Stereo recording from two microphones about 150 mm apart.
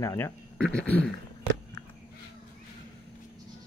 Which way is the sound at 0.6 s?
5° left (ahead or behind).